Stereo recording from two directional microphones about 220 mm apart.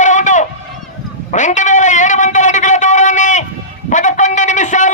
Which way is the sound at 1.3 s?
35° left (ahead or behind).